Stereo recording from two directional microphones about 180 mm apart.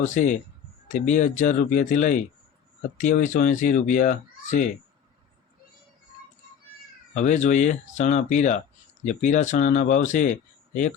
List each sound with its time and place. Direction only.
0.0 s speech: 45° left (ahead or behind)
7.1 s speech: 40° left (ahead or behind)